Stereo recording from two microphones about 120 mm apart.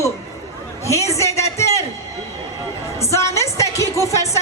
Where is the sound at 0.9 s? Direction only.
25° left (ahead or behind).